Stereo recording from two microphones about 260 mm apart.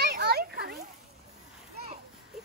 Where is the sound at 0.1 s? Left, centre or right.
Right.